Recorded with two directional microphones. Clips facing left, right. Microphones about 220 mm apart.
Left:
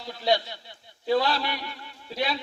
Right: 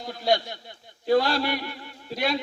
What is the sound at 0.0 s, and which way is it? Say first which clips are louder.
A man's voice: right 1 dB; 50° right (ahead or behind).